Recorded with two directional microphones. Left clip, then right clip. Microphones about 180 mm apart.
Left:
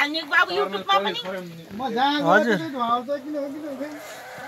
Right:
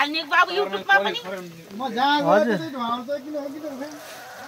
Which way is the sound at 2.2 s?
Centre (ahead or behind).